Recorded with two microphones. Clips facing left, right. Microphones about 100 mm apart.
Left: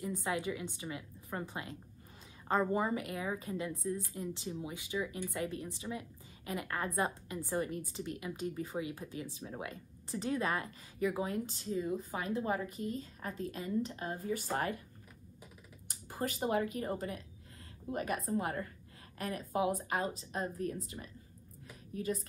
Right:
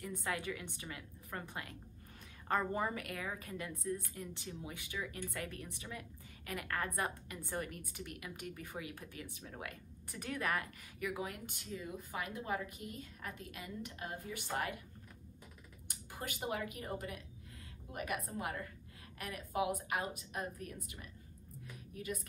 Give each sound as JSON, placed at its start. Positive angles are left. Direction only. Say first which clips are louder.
{"t": 0.0, "sound": "a woman's voice", "louder": "left 4 dB", "side_deg": 20}
{"t": 13.4, "sound": "a woman's voice", "louder": "left 10 dB", "side_deg": 35}
{"t": 15.9, "sound": "speech", "louder": "left 8 dB", "side_deg": 40}
{"t": 17.9, "sound": "a woman's voice", "louder": "left 6 dB", "side_deg": 35}
{"t": 21.9, "sound": "a woman's voice", "louder": "left 7 dB", "side_deg": 35}